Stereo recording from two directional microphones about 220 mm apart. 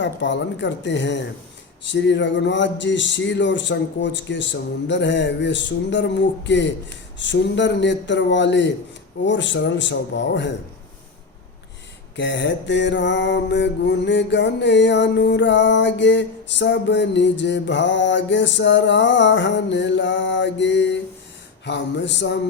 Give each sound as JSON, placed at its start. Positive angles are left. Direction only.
{"t": 0.0, "sound": "speech", "side_deg": 55}
{"t": 1.8, "sound": "mantra", "side_deg": 55}
{"t": 9.2, "sound": "speech", "side_deg": 55}
{"t": 12.1, "sound": "mantra", "side_deg": 55}